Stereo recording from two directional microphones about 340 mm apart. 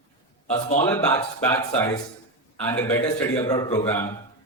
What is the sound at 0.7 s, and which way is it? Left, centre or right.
Speech, centre.